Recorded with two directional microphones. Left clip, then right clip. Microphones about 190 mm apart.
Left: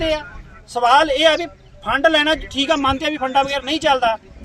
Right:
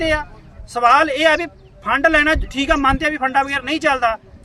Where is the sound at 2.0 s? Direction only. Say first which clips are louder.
Right 1 dB; 25° right (ahead or behind).